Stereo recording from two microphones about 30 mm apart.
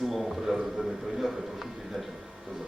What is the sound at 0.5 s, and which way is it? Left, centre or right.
Speech, centre.